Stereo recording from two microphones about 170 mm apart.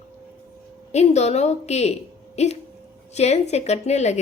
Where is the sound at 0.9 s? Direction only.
40° left (ahead or behind).